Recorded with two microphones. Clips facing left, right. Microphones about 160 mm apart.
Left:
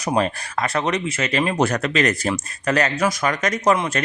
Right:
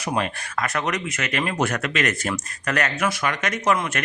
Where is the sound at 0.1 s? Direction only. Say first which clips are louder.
Left 5 dB; 30° left (ahead or behind).